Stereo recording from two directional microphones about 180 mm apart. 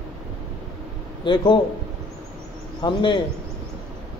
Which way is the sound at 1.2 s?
25° left (ahead or behind).